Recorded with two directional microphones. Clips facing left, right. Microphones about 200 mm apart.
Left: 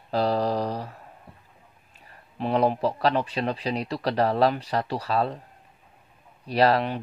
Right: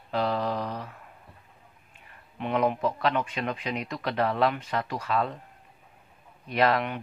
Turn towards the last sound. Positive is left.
turn(degrees=35)  # may be behind; listen again after turning